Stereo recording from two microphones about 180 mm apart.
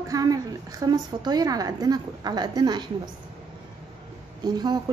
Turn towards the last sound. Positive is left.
turn(degrees=-20)  # may be behind; listen again after turning